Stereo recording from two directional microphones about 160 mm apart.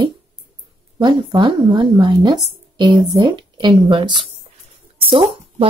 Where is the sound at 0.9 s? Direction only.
30° right (ahead or behind).